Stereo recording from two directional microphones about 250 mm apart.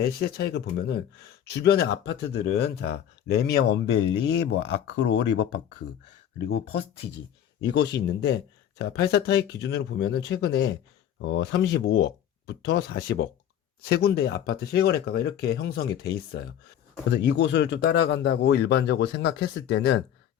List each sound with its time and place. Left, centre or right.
0.0 s speech: left
8.0 s speech: left